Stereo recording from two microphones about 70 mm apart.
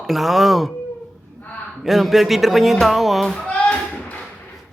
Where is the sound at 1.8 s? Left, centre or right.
Centre.